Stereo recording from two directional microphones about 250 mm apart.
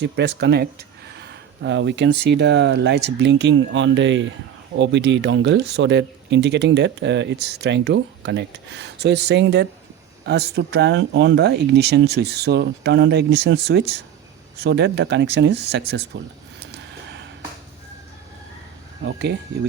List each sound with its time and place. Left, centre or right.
0.0 s speech: right
19.0 s speech: right